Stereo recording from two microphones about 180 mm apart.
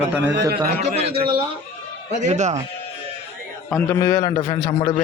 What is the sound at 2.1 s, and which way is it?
Speech, 40° right (ahead or behind).